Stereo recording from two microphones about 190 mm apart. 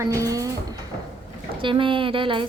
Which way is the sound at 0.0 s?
15° right (ahead or behind).